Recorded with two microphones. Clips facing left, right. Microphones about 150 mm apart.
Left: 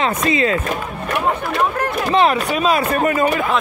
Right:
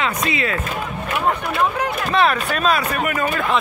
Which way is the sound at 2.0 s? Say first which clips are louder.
Left 3 dB; 25° left (ahead or behind).